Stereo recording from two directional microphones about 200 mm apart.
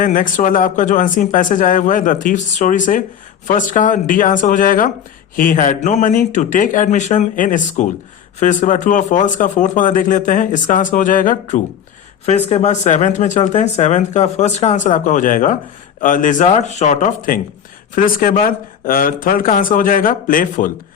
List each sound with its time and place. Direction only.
0.0 s speech: 40° left (ahead or behind)